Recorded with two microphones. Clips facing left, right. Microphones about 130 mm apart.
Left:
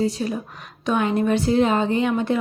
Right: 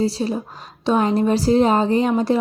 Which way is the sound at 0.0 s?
30° right (ahead or behind).